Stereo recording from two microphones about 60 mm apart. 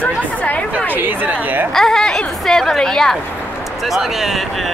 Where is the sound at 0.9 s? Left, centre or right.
Right.